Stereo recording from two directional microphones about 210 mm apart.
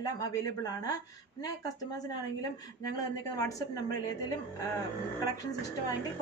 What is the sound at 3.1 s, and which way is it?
Speech, 15° left (ahead or behind).